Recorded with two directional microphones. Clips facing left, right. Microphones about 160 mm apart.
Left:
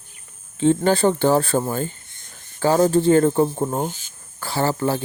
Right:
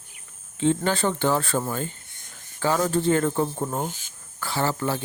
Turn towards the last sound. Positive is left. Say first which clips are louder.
# left 4 dB
turn(degrees=35)  # may be behind; listen again after turning